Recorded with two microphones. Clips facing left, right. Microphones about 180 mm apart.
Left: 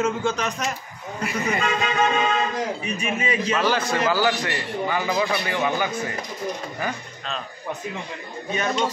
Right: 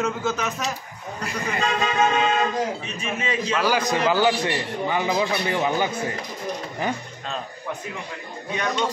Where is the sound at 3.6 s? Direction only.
15° right (ahead or behind).